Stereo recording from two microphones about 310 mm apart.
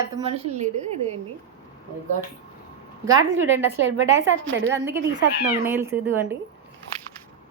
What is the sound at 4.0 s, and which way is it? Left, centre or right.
Speech, right.